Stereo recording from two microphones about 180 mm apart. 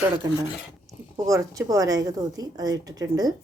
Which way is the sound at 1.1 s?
20° right (ahead or behind).